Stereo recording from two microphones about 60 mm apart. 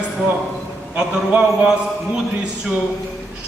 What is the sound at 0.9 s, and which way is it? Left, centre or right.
Speech, centre.